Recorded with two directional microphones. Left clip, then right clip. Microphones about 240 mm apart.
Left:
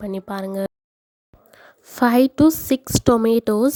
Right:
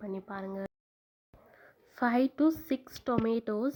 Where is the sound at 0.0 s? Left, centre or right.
Left.